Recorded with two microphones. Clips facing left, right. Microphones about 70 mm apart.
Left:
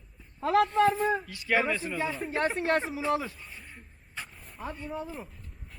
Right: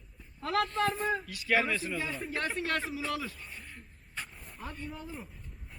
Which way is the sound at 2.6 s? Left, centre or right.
Left.